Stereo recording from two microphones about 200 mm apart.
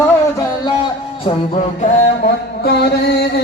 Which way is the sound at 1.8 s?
50° left (ahead or behind).